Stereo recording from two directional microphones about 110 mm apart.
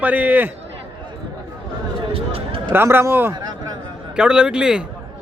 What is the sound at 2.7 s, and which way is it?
Speech, 20° right (ahead or behind).